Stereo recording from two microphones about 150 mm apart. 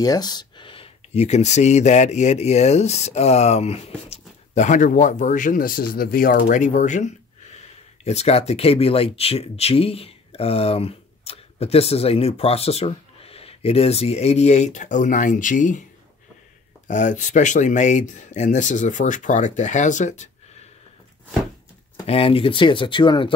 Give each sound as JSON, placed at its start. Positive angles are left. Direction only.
{"t": 0.0, "sound": "speech", "side_deg": 25}
{"t": 16.8, "sound": "speech", "side_deg": 55}
{"t": 22.0, "sound": "speech", "side_deg": 40}